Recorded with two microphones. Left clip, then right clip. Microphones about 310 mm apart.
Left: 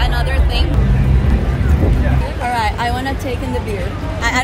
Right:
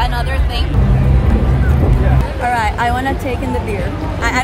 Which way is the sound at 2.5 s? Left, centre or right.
Centre.